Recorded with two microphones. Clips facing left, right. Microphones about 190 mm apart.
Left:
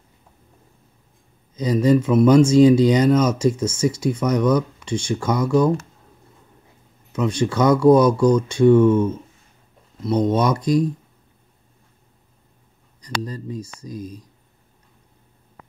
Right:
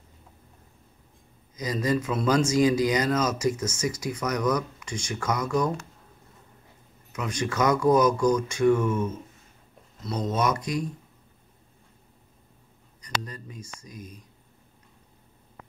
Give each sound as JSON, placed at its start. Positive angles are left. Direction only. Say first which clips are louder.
{"t": 1.5, "sound": "speech", "louder": "left 9 dB", "side_deg": 30}
{"t": 7.1, "sound": "speech", "louder": "left 9 dB", "side_deg": 30}
{"t": 13.0, "sound": "speech", "louder": "left 6 dB", "side_deg": 35}